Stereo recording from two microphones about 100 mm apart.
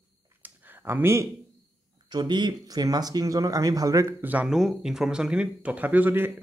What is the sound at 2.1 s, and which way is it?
Speech, 45° right (ahead or behind).